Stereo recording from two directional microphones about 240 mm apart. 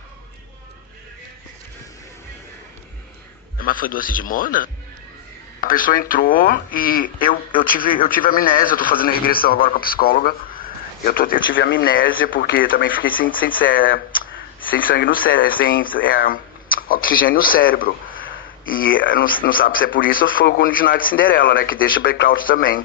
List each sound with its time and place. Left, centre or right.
3.5 s speech: left
11.5 s speech: left